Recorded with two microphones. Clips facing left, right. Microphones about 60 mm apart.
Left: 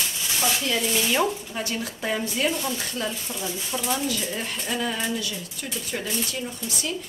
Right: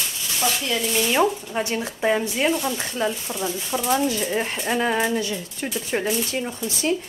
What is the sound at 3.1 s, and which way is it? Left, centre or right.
Speech, centre.